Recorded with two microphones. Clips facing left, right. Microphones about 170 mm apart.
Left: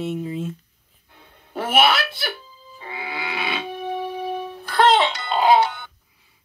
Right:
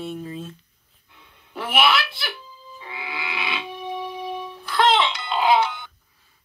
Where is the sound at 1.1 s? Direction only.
45° left (ahead or behind).